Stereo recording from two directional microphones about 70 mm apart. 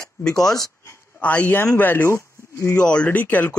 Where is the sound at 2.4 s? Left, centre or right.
Left.